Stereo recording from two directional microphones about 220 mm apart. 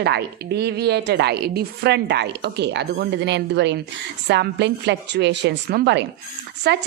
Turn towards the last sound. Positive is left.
turn(degrees=-50)  # may be behind; listen again after turning